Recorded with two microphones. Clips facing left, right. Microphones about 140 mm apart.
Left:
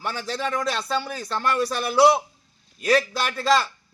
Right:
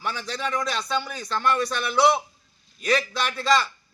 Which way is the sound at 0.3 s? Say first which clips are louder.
Left 3 dB; 5° left (ahead or behind).